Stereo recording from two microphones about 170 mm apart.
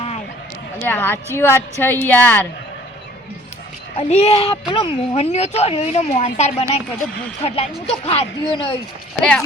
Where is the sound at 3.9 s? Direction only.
40° left (ahead or behind).